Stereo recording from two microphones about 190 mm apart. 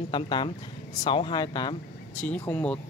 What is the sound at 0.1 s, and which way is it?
Speech, 25° left (ahead or behind).